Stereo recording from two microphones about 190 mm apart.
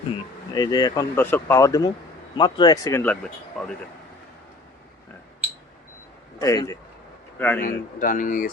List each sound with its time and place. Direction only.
0.1 s speech: 20° left (ahead or behind); by 3.7 s centre (ahead or behind)
6.4 s a man's voice: 20° left (ahead or behind)
7.6 s speech: 45° left (ahead or behind)